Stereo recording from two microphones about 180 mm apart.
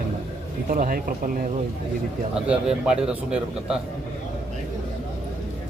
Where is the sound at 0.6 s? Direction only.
50° right (ahead or behind).